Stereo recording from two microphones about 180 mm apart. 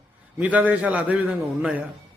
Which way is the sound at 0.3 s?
10° right (ahead or behind).